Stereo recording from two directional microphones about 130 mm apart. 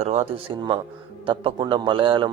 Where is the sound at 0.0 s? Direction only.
55° right (ahead or behind).